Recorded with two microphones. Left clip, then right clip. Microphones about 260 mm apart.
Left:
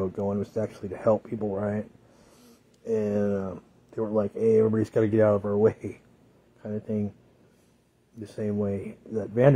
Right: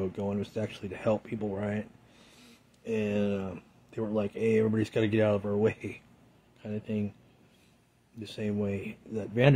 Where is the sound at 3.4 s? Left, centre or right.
Right.